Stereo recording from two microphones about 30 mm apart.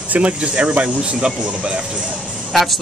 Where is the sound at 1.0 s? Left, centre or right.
Right.